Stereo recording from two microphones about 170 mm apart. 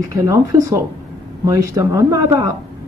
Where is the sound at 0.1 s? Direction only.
20° right (ahead or behind).